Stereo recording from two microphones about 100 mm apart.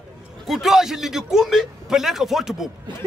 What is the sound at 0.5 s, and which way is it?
A man's voice, 5° right (ahead or behind).